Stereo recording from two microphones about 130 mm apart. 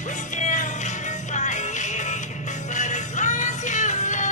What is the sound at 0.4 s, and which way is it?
Music, 65° left (ahead or behind).